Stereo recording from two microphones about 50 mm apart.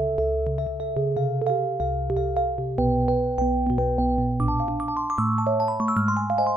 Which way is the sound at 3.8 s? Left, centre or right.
Centre.